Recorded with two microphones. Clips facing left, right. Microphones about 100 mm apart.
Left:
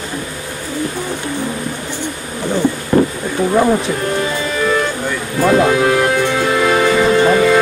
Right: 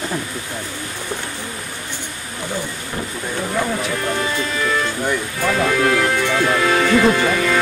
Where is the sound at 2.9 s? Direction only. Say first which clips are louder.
Left 15 dB; 65° left (ahead or behind).